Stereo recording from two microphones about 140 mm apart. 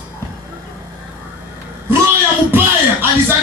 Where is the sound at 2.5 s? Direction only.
15° right (ahead or behind).